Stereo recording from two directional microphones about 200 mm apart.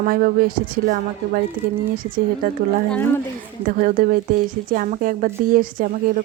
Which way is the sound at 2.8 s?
10° left (ahead or behind).